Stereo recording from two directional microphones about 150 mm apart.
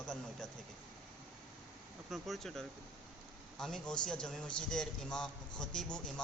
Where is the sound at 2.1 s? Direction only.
Centre (ahead or behind).